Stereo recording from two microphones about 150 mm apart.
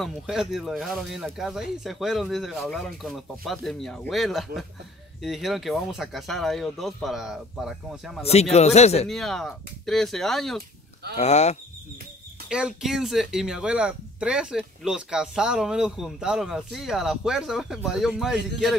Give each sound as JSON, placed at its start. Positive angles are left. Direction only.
{"t": 0.0, "sound": "speech", "side_deg": -5}
{"t": 8.2, "sound": "a man's voice", "side_deg": 45}
{"t": 9.1, "sound": "speech", "side_deg": 5}
{"t": 11.1, "sound": "a man's voice", "side_deg": 50}
{"t": 12.4, "sound": "speech", "side_deg": -5}